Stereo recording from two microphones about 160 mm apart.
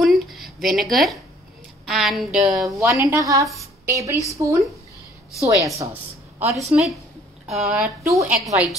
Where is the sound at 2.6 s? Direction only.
20° right (ahead or behind).